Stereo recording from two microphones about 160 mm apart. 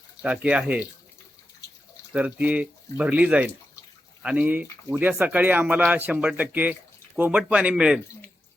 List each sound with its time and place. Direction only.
0.2 s speech: 10° right (ahead or behind)
2.1 s speech: 10° right (ahead or behind)